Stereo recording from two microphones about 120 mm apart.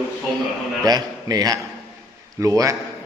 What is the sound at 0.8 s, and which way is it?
A man's voice, 30° right (ahead or behind).